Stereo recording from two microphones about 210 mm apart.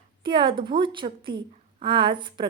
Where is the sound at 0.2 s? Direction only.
25° right (ahead or behind).